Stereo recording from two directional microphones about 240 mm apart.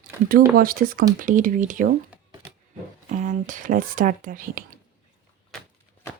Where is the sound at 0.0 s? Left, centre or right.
Right.